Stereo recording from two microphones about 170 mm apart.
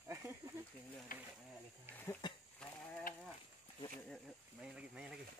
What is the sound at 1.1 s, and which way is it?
Speech, 55° left (ahead or behind).